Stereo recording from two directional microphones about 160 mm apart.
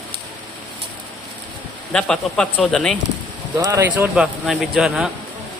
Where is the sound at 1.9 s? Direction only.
5° left (ahead or behind).